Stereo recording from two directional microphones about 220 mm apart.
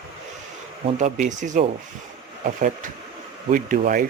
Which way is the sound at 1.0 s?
35° right (ahead or behind).